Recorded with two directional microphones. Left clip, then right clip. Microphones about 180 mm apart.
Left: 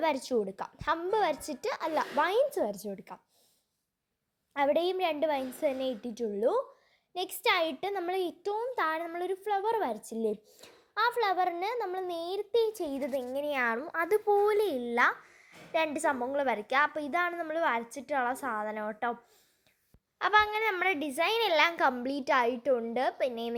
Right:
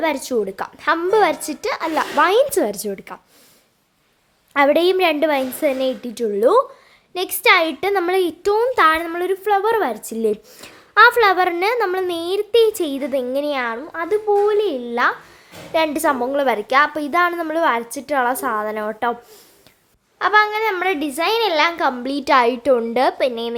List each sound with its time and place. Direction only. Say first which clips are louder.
0.0 s a woman's voice: right 9 dB; 15° left (ahead or behind)
4.5 s a woman's voice: right 13 dB; 5° right (ahead or behind)
13.7 s a child's voice: right 7 dB; 20° left (ahead or behind)
15.7 s a woman's voice: right 11 dB; centre (ahead or behind)
20.1 s a child's voice: right 10 dB; 20° left (ahead or behind)
21.9 s a woman's voice: right 12 dB; 10° left (ahead or behind)